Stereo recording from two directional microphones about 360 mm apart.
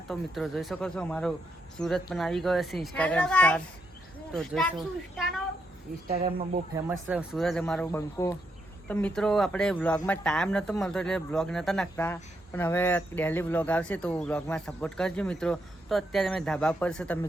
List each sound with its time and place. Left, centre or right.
0.1 s speech: centre
6.1 s speech: centre
7.1 s speech: centre